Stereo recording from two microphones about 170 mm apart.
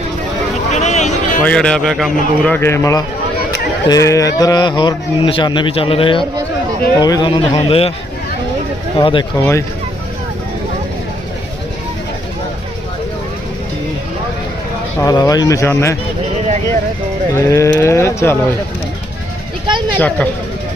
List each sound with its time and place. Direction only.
0.7 s a sound: 45° left (ahead or behind)
1.5 s a man's voice: 5° left (ahead or behind); by 7.9 s 35° left (ahead or behind)
9.0 s a man's voice: 30° left (ahead or behind)
9.4 s speech: 15° left (ahead or behind)
15.0 s a man's voice: 20° left (ahead or behind)
17.3 s speech: 15° left (ahead or behind)
20.0 s speech: 5° left (ahead or behind)